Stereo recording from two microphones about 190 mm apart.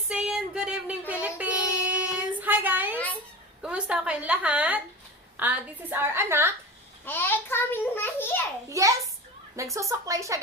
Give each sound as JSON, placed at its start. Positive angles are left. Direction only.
{"t": 0.1, "sound": "child singing", "side_deg": -5}
{"t": 3.6, "sound": "a woman's voice", "side_deg": -5}
{"t": 7.0, "sound": "a child's voice", "side_deg": 10}
{"t": 8.7, "sound": "a woman's voice", "side_deg": -15}